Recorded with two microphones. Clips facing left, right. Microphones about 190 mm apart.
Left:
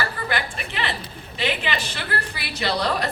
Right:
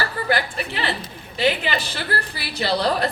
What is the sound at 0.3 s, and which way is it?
A woman's voice, 35° right (ahead or behind).